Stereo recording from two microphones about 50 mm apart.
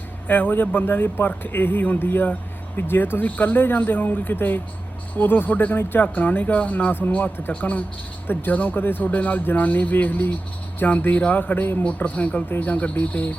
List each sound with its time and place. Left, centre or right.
0.3 s speech: left
8.3 s speech: left
11.9 s speech: left